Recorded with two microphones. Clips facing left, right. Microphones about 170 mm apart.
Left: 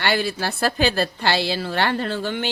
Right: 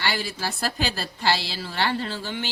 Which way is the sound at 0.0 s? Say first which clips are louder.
Left 6 dB; 60° left (ahead or behind).